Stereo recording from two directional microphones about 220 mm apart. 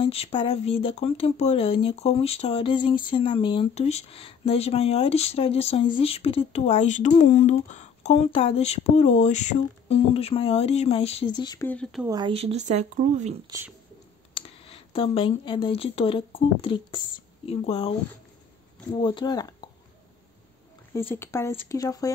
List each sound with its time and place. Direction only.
0.0 s speech: 25° left (ahead or behind)
11.6 s speech: 5° left (ahead or behind)
12.1 s speech: 20° right (ahead or behind)
13.5 s speech: 10° right (ahead or behind)
14.3 s speech: 25° left (ahead or behind)
18.9 s speech: 20° left (ahead or behind)
20.9 s speech: 10° left (ahead or behind)